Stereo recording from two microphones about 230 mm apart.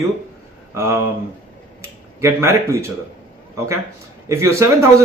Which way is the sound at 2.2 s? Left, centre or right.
Centre.